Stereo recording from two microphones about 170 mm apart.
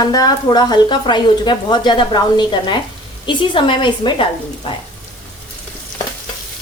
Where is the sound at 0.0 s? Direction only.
20° left (ahead or behind).